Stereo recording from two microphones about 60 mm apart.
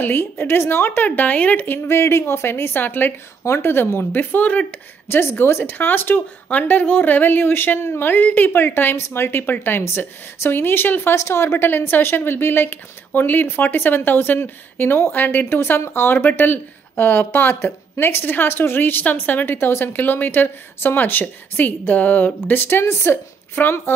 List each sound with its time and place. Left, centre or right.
0.0 s a woman's voice: left
1.9 s a woman's voice: left
3.4 s a woman's voice: left
5.0 s a woman's voice: left
11.1 s a woman's voice: left
11.5 s a woman's voice: left
23.5 s a woman's voice: left